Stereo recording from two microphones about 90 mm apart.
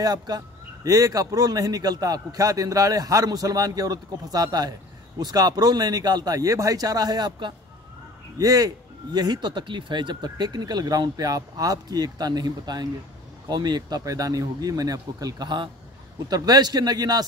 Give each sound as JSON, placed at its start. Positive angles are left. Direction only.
{"t": 0.0, "sound": "a man's voice", "side_deg": -45}
{"t": 8.4, "sound": "a man's voice", "side_deg": -40}